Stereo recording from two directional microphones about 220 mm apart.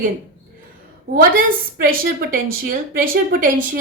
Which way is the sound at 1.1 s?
40° right (ahead or behind).